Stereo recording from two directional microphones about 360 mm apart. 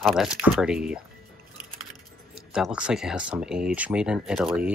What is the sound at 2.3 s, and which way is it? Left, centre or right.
Speech, centre.